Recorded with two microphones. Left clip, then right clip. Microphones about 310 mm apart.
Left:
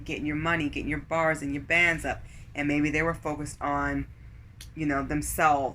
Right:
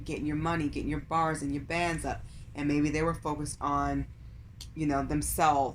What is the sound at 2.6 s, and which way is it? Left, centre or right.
Speech, centre.